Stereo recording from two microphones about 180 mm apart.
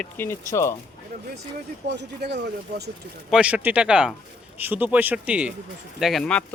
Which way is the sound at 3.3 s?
5° right (ahead or behind).